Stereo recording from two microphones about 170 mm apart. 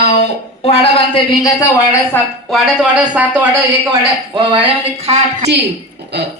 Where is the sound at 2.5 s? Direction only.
5° right (ahead or behind).